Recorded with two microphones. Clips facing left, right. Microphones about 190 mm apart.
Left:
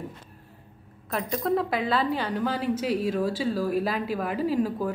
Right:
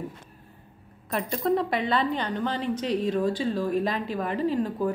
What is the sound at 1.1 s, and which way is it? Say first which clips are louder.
Speech: right 1 dB; centre (ahead or behind).